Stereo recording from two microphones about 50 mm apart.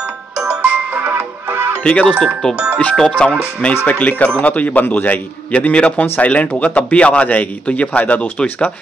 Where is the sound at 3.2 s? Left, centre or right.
Centre.